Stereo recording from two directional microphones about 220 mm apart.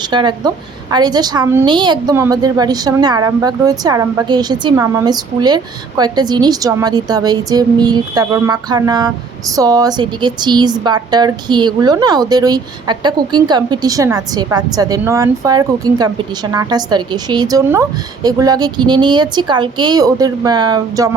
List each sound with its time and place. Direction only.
0.1 s speech: 20° right (ahead or behind)